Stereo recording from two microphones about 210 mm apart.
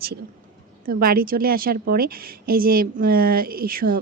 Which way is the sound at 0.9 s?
45° right (ahead or behind).